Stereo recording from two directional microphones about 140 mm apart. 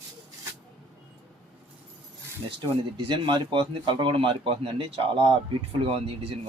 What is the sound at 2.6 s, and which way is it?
Speech, 35° right (ahead or behind).